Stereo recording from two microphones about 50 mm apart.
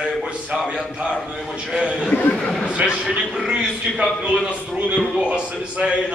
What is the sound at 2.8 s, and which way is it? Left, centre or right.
A man's voice, centre.